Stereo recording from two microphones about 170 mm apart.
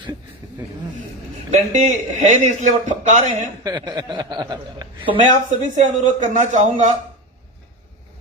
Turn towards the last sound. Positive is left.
turn(degrees=-45)  # may be behind; listen again after turning